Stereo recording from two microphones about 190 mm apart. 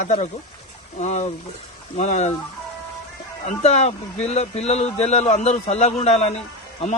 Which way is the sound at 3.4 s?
35° left (ahead or behind).